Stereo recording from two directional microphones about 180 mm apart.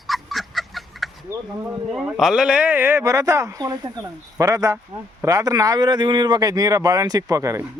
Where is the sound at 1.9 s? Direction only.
Centre (ahead or behind).